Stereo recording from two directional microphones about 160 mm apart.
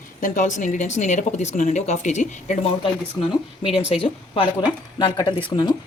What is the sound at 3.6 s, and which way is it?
Speech, 40° left (ahead or behind).